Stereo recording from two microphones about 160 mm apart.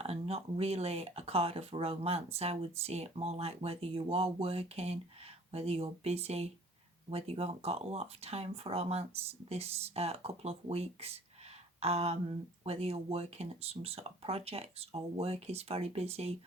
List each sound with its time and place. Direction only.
0.0 s speech: 40° right (ahead or behind)